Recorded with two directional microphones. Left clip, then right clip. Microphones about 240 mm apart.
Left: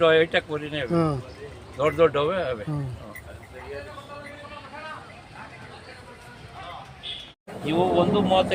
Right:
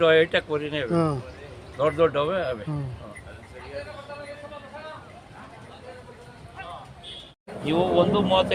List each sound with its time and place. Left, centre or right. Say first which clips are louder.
0.0 s speech: even; centre
0.9 s a man's voice: left 2 dB; centre
7.6 s speech: even; right